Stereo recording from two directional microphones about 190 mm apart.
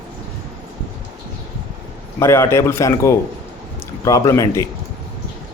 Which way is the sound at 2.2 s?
15° left (ahead or behind).